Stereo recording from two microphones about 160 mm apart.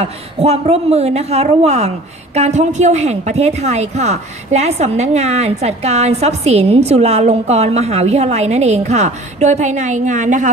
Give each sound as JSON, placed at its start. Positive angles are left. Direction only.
{"t": 0.0, "sound": "a woman's voice", "side_deg": -40}